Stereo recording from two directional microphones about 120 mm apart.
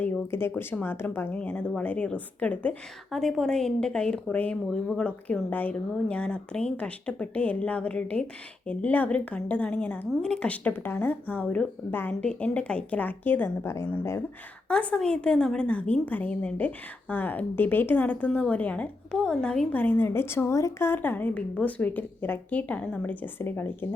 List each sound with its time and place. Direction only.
0.0 s a woman's voice: 15° left (ahead or behind)
14.7 s a woman's voice: 10° left (ahead or behind)